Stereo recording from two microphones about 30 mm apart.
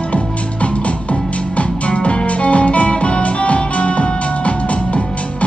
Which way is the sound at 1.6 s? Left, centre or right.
Left.